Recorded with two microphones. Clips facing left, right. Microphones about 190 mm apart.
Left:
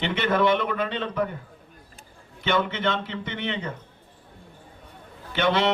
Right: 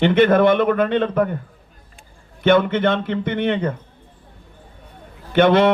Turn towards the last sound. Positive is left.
turn(degrees=-55)  # may be behind; listen again after turning